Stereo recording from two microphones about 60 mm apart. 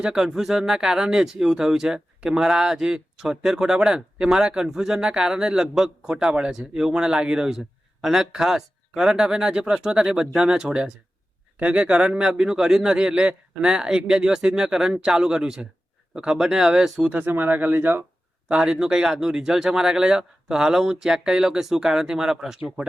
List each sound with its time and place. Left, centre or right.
0.0 s speech: centre
17.2 s speech: right
18.4 s speech: centre